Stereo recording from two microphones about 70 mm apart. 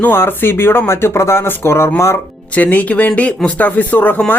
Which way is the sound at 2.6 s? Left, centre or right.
Left.